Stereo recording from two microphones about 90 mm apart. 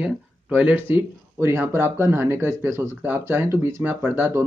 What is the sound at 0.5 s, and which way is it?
Speech, 20° right (ahead or behind).